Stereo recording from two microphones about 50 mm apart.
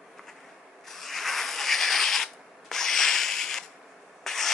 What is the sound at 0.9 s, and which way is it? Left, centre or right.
Rub, centre.